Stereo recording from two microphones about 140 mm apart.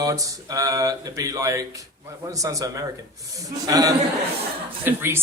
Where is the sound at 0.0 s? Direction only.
25° right (ahead or behind).